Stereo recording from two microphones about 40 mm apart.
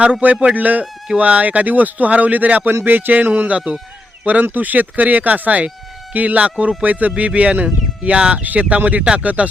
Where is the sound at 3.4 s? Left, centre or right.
Right.